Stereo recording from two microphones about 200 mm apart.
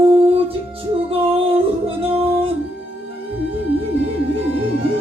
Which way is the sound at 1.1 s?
30° right (ahead or behind).